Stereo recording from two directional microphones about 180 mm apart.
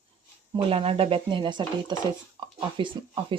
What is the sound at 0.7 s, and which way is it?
Speech, 30° right (ahead or behind).